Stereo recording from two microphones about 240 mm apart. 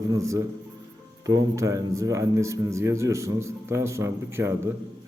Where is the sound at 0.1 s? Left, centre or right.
Centre.